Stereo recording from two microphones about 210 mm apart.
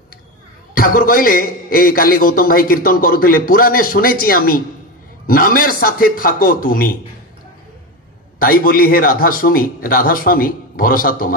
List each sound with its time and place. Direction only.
0.7 s a man's voice: 40° left (ahead or behind)
8.4 s a man's voice: 45° left (ahead or behind)